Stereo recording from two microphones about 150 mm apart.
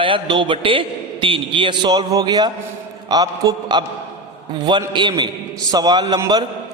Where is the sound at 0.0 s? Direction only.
35° right (ahead or behind).